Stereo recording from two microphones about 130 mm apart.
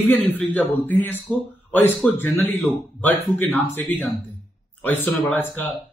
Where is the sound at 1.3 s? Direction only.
10° left (ahead or behind).